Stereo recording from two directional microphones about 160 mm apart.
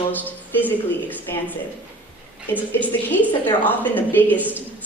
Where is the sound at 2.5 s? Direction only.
10° left (ahead or behind).